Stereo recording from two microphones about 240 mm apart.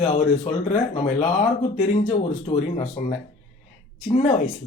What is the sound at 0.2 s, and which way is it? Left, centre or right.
Speech, left.